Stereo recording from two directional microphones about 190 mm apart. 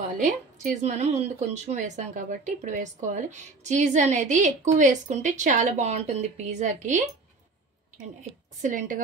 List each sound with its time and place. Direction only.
0.2 s speech: 40° right (ahead or behind)
8.2 s speech: 40° right (ahead or behind)